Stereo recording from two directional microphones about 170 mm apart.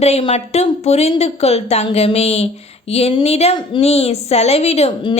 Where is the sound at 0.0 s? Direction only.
35° left (ahead or behind).